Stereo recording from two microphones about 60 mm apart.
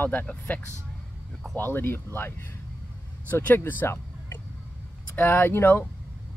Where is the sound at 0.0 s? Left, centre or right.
Left.